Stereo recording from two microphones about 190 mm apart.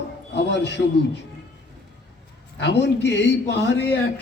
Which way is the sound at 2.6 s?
65° left (ahead or behind).